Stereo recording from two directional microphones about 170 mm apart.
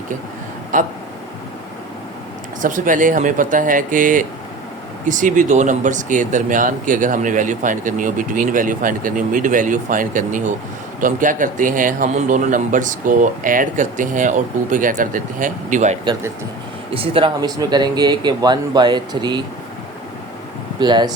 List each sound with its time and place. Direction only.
0.7 s speech: 50° right (ahead or behind)
2.6 s speech: 50° right (ahead or behind)
16.9 s speech: 35° right (ahead or behind)
20.7 s speech: 25° right (ahead or behind)